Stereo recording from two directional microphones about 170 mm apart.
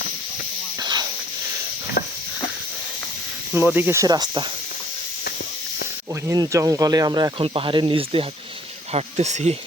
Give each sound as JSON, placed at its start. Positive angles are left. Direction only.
{"t": 0.8, "sound": "hiss", "side_deg": -25}
{"t": 3.5, "sound": "speech", "side_deg": -10}
{"t": 6.2, "sound": "speech", "side_deg": -20}